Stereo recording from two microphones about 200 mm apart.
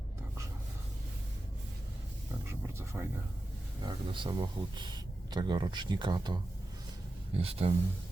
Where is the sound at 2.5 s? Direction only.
10° right (ahead or behind).